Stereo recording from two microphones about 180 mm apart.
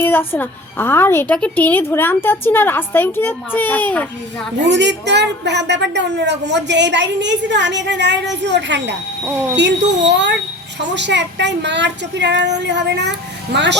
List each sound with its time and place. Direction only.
0.0 s a woman's voice: 10° left (ahead or behind)
4.7 s a woman's voice: 75° right (ahead or behind)